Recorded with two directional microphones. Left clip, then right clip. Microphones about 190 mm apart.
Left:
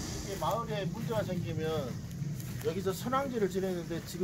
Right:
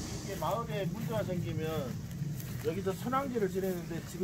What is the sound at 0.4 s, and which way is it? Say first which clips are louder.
Speech: left 1 dB; 55° left (ahead or behind).